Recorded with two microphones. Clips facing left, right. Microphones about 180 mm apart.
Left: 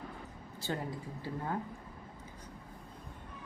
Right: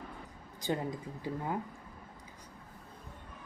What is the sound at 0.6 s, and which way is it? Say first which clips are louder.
Speech: right 3 dB; 15° right (ahead or behind).